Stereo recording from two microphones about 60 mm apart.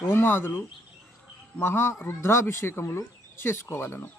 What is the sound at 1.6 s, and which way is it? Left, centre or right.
Speech, left.